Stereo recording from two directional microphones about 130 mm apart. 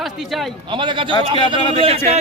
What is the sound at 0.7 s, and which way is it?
A man's voice, 40° right (ahead or behind).